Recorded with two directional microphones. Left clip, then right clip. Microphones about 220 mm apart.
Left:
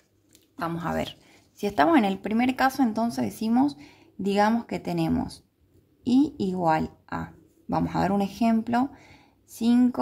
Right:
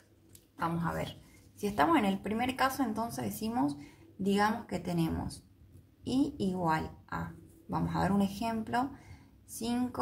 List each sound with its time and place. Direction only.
0.6 s speech: 50° left (ahead or behind)
1.6 s speech: 40° left (ahead or behind)